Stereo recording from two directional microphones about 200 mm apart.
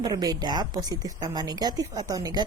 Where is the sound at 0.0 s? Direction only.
20° right (ahead or behind).